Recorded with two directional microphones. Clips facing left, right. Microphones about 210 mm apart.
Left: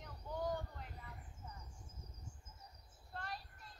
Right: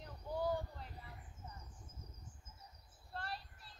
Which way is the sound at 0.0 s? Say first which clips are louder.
Right 3 dB; 35° right (ahead or behind).